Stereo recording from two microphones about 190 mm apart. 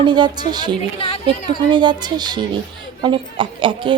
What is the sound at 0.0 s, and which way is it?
Speech, 25° right (ahead or behind).